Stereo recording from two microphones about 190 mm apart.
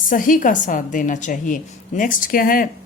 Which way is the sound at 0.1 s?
45° left (ahead or behind).